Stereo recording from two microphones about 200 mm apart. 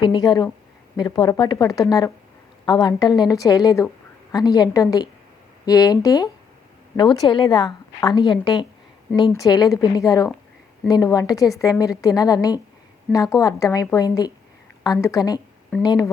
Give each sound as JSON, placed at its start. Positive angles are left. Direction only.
{"t": 0.0, "sound": "a woman's voice", "side_deg": 25}